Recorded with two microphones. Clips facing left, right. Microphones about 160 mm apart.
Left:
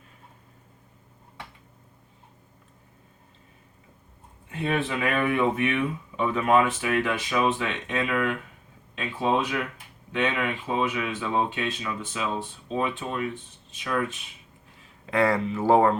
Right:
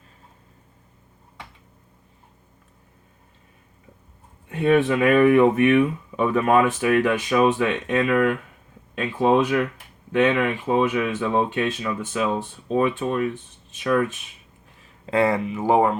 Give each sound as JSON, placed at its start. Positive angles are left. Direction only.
{"t": 4.4, "sound": "speech", "side_deg": -55}
{"t": 15.0, "sound": "speech", "side_deg": -25}
{"t": 15.4, "sound": "speech", "side_deg": -15}